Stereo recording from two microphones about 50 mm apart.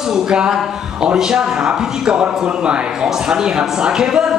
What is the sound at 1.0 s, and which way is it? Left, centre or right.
A man's voice, centre.